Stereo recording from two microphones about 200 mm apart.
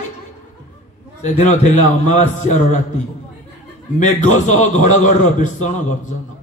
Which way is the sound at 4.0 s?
40° left (ahead or behind).